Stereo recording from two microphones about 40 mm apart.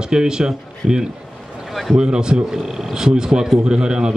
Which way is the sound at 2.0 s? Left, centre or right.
Right.